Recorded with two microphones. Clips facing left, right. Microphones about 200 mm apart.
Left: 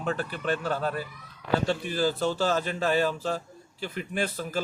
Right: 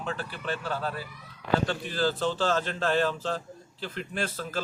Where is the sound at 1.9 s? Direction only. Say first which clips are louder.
Even; 10° left (ahead or behind).